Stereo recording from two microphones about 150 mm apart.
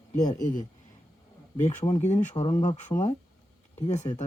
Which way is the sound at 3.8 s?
50° left (ahead or behind).